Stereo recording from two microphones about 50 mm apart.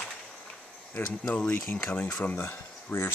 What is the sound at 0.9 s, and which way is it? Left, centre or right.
Speech, left.